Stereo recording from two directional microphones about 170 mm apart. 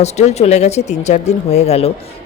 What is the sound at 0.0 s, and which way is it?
Speech, 40° left (ahead or behind).